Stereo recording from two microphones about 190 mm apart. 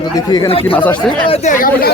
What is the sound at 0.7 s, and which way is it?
Speech, 10° left (ahead or behind).